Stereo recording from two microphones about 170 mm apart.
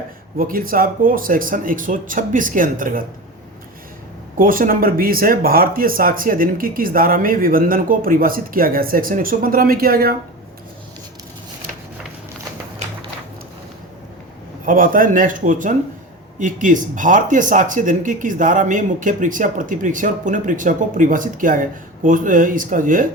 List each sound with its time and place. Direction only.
0.3 s speech: 55° right (ahead or behind)
4.4 s speech: 55° right (ahead or behind)
14.7 s speech: 55° right (ahead or behind)